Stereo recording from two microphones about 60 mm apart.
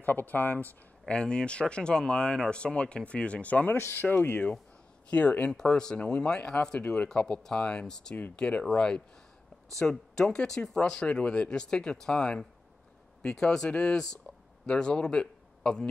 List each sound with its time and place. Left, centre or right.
0.0 s speech: left
1.0 s speech: centre
5.5 s speech: centre